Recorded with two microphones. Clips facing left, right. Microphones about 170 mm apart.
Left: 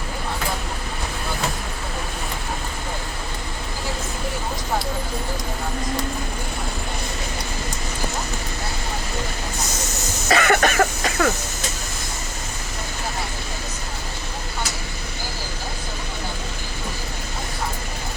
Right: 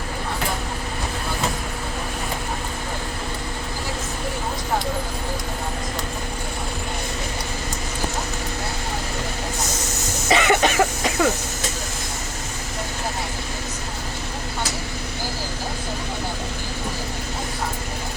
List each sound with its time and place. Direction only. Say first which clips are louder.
10.2 s cough: even; 15° right (ahead or behind)